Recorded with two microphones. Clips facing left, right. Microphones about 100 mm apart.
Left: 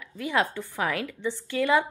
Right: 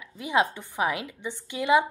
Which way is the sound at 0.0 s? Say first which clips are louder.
Right 1 dB; 20° right (ahead or behind).